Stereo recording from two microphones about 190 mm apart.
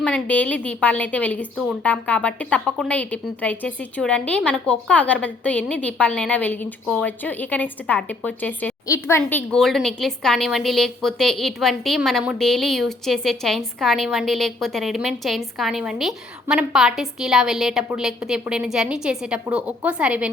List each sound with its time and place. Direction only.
0.0 s a woman's voice: 5° left (ahead or behind)